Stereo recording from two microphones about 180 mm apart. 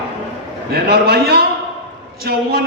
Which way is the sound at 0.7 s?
60° right (ahead or behind).